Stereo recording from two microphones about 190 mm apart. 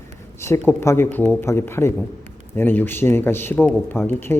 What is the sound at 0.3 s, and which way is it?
A man's voice, 15° left (ahead or behind).